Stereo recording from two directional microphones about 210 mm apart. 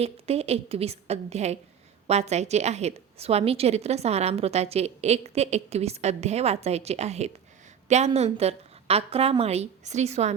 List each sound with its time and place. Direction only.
0.0 s a woman's voice: 30° right (ahead or behind)